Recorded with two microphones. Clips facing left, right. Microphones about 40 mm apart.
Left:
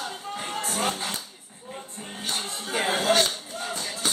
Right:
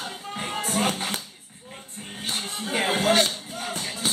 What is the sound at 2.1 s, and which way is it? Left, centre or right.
Music, centre.